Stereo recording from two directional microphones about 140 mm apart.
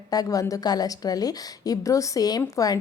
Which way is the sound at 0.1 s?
25° left (ahead or behind).